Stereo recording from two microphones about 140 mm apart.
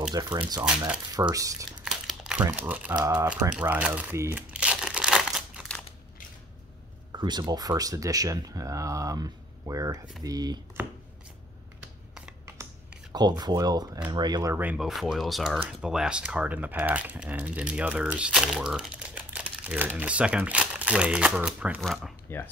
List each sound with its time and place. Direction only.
0.1 s speech: 30° right (ahead or behind)
0.6 s speech: 10° right (ahead or behind)
1.3 s speech: 25° right (ahead or behind)
1.9 s crumpling: 5° right (ahead or behind)
2.7 s speech: 10° right (ahead or behind)
4.2 s crumpling: 10° right (ahead or behind)
7.1 s speech: 30° right (ahead or behind)
13.4 s speech: 30° right (ahead or behind)
14.6 s speech: 10° right (ahead or behind)
14.9 s speech: centre (ahead or behind)